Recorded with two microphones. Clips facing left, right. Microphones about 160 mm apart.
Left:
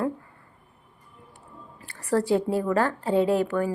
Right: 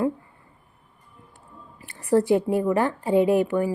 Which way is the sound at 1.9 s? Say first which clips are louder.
Right 3 dB; 15° right (ahead or behind).